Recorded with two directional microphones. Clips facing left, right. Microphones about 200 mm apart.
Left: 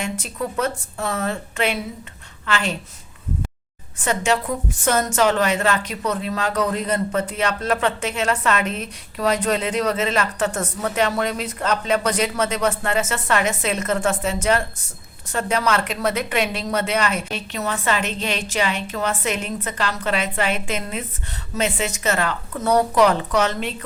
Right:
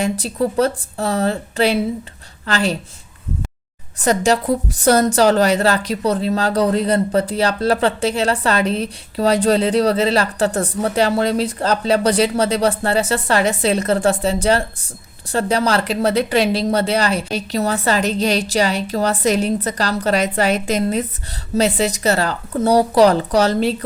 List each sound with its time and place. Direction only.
0.0 s a woman's voice: 35° right (ahead or behind)
3.9 s a woman's voice: 35° right (ahead or behind)